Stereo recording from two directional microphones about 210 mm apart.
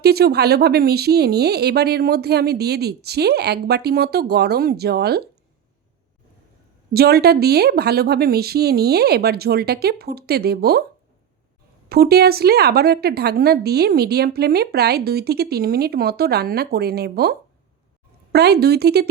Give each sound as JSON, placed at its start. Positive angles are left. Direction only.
{"t": 0.0, "sound": "a woman's voice", "side_deg": -50}
{"t": 6.9, "sound": "a woman's voice", "side_deg": -50}
{"t": 11.9, "sound": "a woman's voice", "side_deg": -50}